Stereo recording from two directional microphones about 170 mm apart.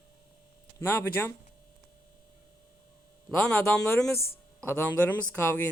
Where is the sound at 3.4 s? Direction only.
5° left (ahead or behind).